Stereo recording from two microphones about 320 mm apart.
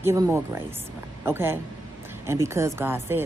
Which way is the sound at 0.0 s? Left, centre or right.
Centre.